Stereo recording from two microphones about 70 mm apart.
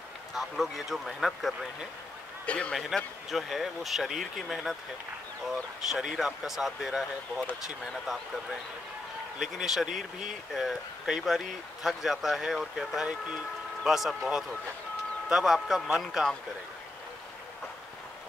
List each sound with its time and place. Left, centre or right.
0.4 s speech: centre
2.4 s a man's voice: centre
2.7 s speech: centre
5.9 s speech: centre
9.4 s speech: centre